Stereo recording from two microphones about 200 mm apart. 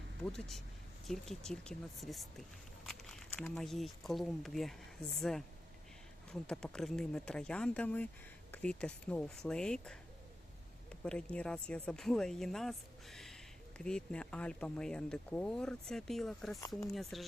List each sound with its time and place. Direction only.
0.3 s speech: centre (ahead or behind)
2.8 s walk: centre (ahead or behind)
3.4 s speech: 5° left (ahead or behind)
6.5 s speech: 5° left (ahead or behind)
11.0 s speech: 5° left (ahead or behind)
16.6 s speech: 15° left (ahead or behind)
16.9 s speech: centre (ahead or behind)